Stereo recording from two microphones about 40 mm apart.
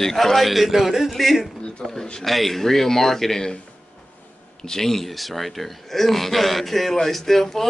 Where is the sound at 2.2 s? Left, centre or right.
Centre.